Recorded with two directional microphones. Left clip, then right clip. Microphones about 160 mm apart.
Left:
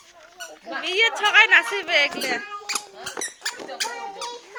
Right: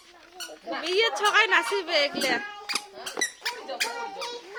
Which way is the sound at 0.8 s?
30° right (ahead or behind).